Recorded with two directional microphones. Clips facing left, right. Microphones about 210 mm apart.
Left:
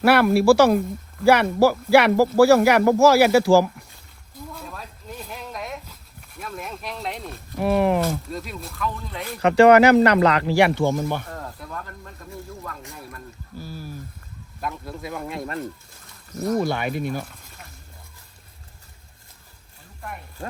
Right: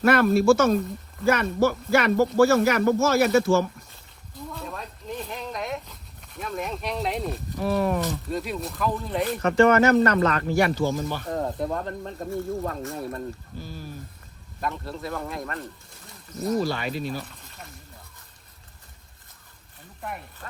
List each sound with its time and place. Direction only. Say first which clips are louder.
0.1 s speech: left 2 dB; 75° left (ahead or behind)
1.2 s speech: left 5 dB; 90° left
4.5 s speech: right 4 dB; centre (ahead or behind)
7.6 s speech: left 4 dB; 70° left (ahead or behind)
8.3 s speech: right 4 dB; centre (ahead or behind)
9.5 s speech: left 5 dB; 90° left; by 11.2 s 60° left (ahead or behind)
11.3 s speech: right 9 dB; 20° right (ahead or behind)
13.6 s speech: left 2 dB; 10° left (ahead or behind)
16.4 s speech: left 2 dB; 55° left (ahead or behind)
20.0 s speech: right 2 dB; centre (ahead or behind)